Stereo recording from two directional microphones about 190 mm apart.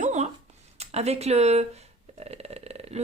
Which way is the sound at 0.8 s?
35° right (ahead or behind).